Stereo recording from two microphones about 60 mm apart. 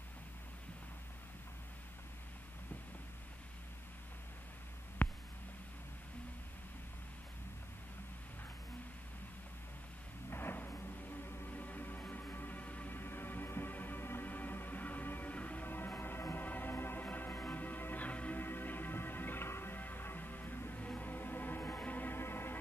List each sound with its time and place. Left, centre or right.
5.0 s hum: left
10.3 s music: left